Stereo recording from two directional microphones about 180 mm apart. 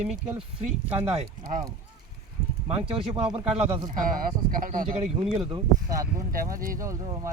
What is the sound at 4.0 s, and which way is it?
Speech, 50° right (ahead or behind).